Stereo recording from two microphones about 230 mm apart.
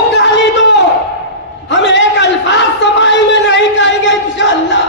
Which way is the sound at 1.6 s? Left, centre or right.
Left.